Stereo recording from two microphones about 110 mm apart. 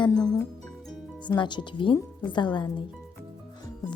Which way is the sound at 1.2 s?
45° left (ahead or behind).